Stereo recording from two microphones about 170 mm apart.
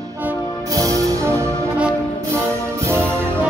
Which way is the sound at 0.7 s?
20° right (ahead or behind).